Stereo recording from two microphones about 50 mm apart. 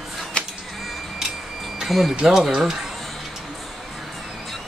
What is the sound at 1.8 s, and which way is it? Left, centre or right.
Speech, centre.